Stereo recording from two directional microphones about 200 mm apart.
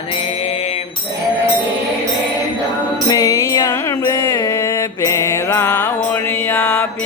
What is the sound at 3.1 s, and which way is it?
Music, 15° left (ahead or behind).